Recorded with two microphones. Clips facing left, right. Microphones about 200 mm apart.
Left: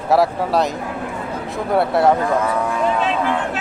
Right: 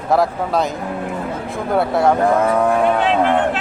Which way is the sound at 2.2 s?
55° right (ahead or behind).